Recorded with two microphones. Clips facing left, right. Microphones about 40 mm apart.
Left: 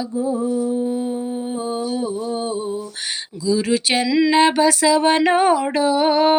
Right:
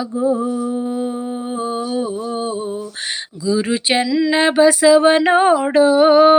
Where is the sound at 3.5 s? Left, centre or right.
Right.